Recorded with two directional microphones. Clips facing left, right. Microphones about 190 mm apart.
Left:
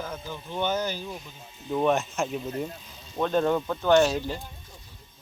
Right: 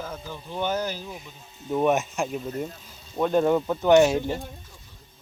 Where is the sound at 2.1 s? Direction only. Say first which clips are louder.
Right 1 dB; centre (ahead or behind); by 4.3 s 20° right (ahead or behind).